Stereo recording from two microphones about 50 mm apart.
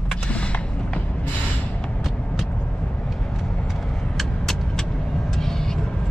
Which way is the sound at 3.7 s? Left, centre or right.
Centre.